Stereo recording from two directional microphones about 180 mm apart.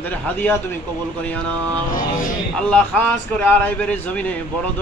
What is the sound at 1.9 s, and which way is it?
Speech, 50° left (ahead or behind).